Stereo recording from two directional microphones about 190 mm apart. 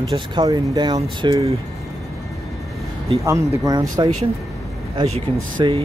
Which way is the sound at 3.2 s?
15° right (ahead or behind).